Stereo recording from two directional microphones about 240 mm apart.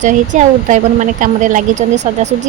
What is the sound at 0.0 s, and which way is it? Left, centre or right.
A woman's voice, right.